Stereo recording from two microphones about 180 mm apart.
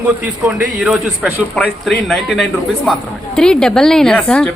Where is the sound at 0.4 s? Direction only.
Centre (ahead or behind).